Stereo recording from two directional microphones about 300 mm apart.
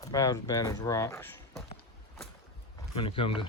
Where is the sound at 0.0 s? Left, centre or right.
Centre.